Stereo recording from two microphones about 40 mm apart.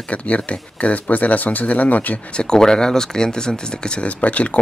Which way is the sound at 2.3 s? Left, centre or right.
Centre.